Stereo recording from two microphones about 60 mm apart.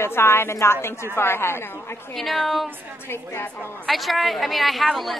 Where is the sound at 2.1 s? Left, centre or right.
Centre.